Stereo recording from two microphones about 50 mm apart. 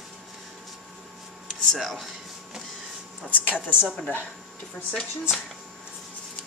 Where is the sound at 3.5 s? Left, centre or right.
Right.